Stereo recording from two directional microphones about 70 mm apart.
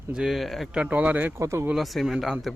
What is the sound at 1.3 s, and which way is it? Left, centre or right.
Speech, right.